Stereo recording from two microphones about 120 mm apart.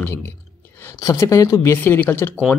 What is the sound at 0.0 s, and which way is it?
Clicking, 20° left (ahead or behind).